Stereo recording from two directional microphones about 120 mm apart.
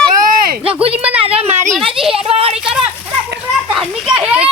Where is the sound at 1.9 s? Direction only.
5° right (ahead or behind).